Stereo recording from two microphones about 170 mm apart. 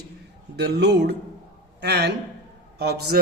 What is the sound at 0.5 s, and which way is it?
A man's voice, 80° right.